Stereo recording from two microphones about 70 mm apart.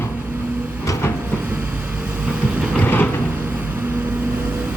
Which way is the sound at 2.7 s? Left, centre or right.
Left.